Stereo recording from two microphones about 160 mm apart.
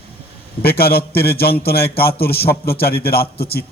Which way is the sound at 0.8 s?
75° left (ahead or behind).